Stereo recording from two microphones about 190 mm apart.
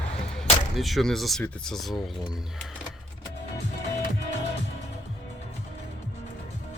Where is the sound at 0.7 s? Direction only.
Centre (ahead or behind).